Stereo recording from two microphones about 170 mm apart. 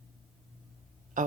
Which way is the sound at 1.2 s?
50° right (ahead or behind).